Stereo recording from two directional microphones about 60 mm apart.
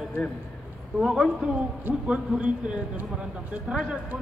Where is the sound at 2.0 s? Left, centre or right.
Centre.